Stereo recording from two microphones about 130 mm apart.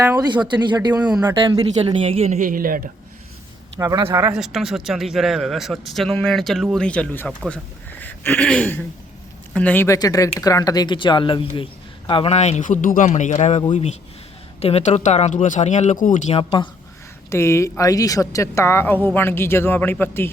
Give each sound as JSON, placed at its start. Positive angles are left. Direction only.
{"t": 0.0, "sound": "speech", "side_deg": -25}
{"t": 0.3, "sound": "speech", "side_deg": -35}
{"t": 1.8, "sound": "speech", "side_deg": -50}
{"t": 2.4, "sound": "speech", "side_deg": -90}
{"t": 4.1, "sound": "speech", "side_deg": -20}
{"t": 4.4, "sound": "speech", "side_deg": 0}
{"t": 14.6, "sound": "speech", "side_deg": 55}
{"t": 16.4, "sound": "speech", "side_deg": 45}
{"t": 17.2, "sound": "a man's voice", "side_deg": 20}